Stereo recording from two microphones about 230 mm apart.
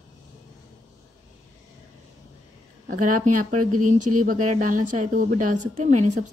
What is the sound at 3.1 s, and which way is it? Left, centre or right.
Speech, right.